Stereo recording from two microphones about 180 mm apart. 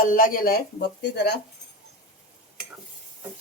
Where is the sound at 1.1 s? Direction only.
65° left (ahead or behind).